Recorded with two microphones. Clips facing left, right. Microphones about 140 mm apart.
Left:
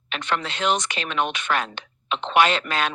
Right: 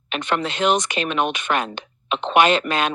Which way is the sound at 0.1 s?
15° right (ahead or behind).